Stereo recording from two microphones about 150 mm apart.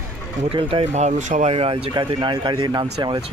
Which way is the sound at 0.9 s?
50° right (ahead or behind).